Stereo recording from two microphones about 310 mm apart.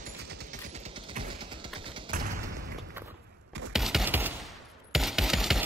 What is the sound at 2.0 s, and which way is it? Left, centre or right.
Thump, right.